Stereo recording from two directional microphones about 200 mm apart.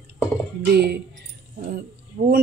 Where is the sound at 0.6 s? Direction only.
55° right (ahead or behind).